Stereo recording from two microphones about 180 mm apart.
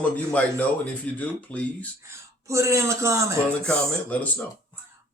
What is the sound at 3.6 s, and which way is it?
Speech, 10° left (ahead or behind).